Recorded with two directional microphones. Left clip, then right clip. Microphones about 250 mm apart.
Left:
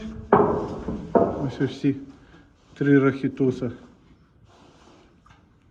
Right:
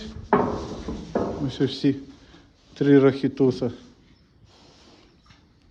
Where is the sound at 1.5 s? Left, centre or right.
Centre.